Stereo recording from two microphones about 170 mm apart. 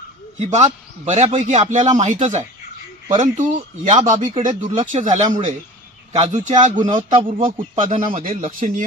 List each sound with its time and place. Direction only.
0.4 s a man's voice: 40° right (ahead or behind)
7.3 s a man's voice: 30° right (ahead or behind)
8.5 s speech: 50° right (ahead or behind)